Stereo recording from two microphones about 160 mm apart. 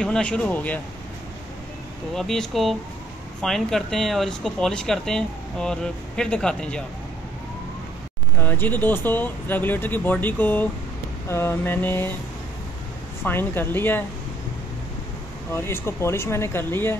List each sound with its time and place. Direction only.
0.0 s speech: 5° left (ahead or behind)
2.1 s speech: 5° left (ahead or behind)
8.4 s speech: 10° left (ahead or behind)
13.2 s speech: 15° left (ahead or behind)
15.5 s speech: 15° left (ahead or behind)